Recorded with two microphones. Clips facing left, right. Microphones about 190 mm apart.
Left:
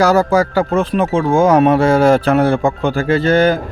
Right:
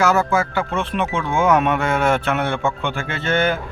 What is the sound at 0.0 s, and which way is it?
A man's voice, 35° left (ahead or behind).